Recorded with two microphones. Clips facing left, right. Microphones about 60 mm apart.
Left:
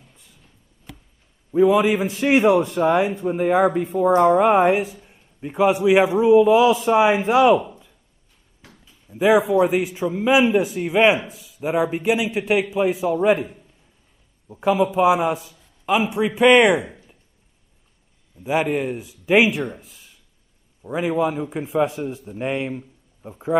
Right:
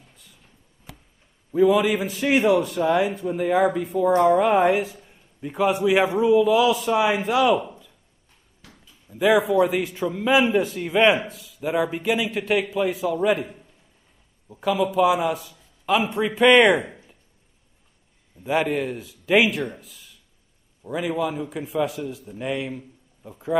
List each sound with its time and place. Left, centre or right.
1.6 s speech: left
8.6 s a sound: centre
9.5 s a man's voice: left
11.6 s speech: left
14.5 s speech: left
15.8 s a man's voice: centre
18.4 s a man's voice: centre
19.7 s a man's voice: left